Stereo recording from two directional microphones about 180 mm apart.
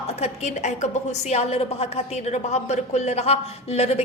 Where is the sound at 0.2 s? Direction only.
40° left (ahead or behind).